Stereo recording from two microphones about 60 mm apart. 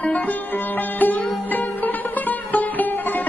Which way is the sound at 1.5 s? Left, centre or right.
Left.